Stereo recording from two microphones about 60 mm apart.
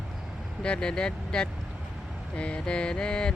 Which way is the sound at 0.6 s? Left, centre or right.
Centre.